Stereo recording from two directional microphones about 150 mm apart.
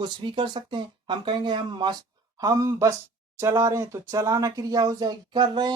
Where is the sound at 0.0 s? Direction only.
30° right (ahead or behind).